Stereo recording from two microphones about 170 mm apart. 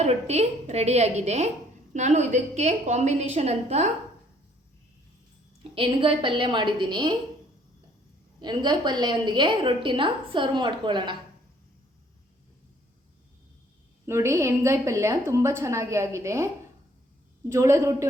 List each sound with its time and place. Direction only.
0.0 s a woman's voice: 40° right (ahead or behind)
5.7 s a woman's voice: 30° right (ahead or behind)
8.4 s a woman's voice: 25° right (ahead or behind)
14.1 s a woman's voice: 15° right (ahead or behind)
17.5 s a woman's voice: 15° right (ahead or behind)